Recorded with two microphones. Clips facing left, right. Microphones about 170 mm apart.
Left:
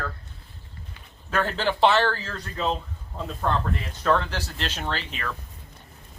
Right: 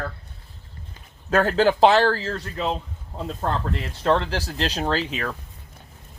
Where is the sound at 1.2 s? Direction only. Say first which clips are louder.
Right 7 dB; 40° right (ahead or behind).